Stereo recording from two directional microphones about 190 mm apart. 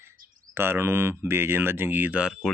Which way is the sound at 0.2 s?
50° right (ahead or behind).